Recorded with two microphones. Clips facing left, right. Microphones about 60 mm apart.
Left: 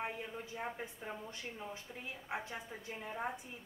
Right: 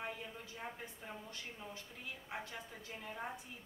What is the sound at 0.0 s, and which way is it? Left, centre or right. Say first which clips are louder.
A woman's voice: left 4 dB; left.